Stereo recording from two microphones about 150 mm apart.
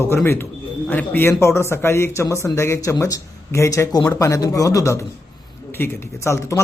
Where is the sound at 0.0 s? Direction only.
15° left (ahead or behind).